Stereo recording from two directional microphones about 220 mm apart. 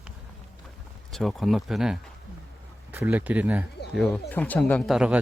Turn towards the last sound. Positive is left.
turn(degrees=-5)  # may be behind; listen again after turning